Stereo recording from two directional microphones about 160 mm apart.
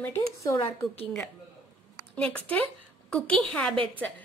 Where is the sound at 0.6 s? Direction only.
35° left (ahead or behind).